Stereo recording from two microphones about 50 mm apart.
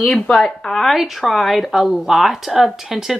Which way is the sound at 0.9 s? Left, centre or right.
Centre.